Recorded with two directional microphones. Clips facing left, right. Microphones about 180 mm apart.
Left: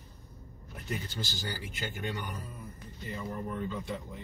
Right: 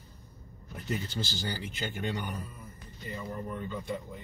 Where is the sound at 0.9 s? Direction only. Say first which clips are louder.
Right 3 dB; 20° right (ahead or behind).